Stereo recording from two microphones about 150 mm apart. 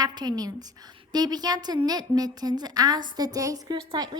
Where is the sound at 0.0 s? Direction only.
25° right (ahead or behind).